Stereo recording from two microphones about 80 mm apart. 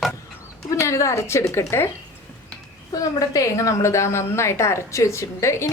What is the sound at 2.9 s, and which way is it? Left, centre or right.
A woman's voice, left.